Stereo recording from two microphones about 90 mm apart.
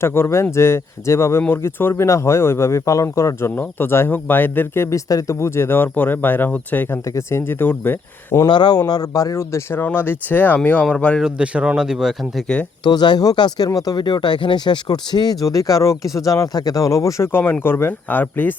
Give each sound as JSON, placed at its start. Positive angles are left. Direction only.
{"t": 0.0, "sound": "speech", "side_deg": 25}
{"t": 3.5, "sound": "speech", "side_deg": 20}
{"t": 7.1, "sound": "speech", "side_deg": 30}
{"t": 8.4, "sound": "speech", "side_deg": 55}
{"t": 11.2, "sound": "speech", "side_deg": -10}
{"t": 12.8, "sound": "speech", "side_deg": 55}